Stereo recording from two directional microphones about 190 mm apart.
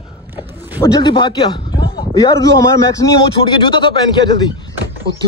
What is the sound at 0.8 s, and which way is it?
Speech, 20° left (ahead or behind).